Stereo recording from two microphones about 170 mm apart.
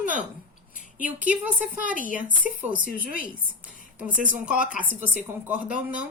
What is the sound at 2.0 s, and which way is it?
Speech, 50° left (ahead or behind).